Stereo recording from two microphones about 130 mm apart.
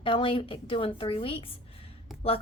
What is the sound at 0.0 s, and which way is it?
A woman's voice, 40° left (ahead or behind).